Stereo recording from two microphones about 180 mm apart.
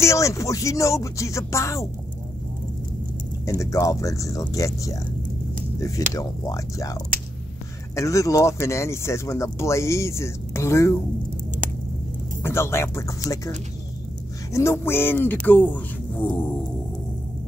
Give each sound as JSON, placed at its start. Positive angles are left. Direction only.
{"t": 0.0, "sound": "speech", "side_deg": 15}
{"t": 3.4, "sound": "speech", "side_deg": 15}
{"t": 12.4, "sound": "speech", "side_deg": 15}
{"t": 14.5, "sound": "speech", "side_deg": 15}